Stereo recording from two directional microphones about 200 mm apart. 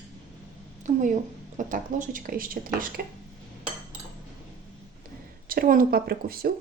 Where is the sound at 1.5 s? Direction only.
40° right (ahead or behind).